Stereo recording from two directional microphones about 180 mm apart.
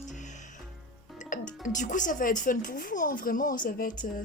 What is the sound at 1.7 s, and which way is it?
Speech, 45° left (ahead or behind).